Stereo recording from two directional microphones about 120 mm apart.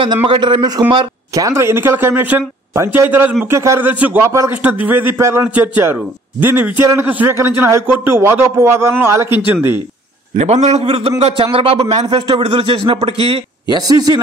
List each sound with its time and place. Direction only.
0.0 s speech: 45° right (ahead or behind)
1.5 s a man's voice: 20° right (ahead or behind)
4.2 s a man's voice: 25° right (ahead or behind)
4.5 s a man's voice: 15° right (ahead or behind)
10.3 s a man's voice: 70° right (ahead or behind)
13.7 s speech: 35° right (ahead or behind)